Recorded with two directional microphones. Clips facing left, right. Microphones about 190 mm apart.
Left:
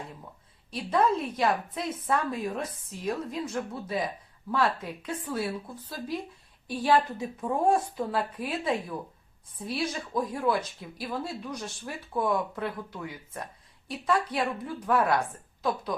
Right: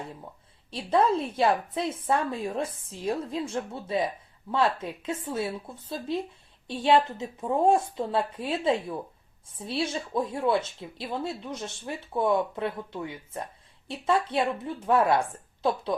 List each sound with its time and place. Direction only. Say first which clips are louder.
0.7 s speech: right 2 dB; 30° right (ahead or behind)